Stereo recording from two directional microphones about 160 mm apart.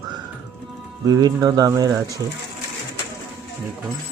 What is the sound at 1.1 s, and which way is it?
Speech, 25° right (ahead or behind).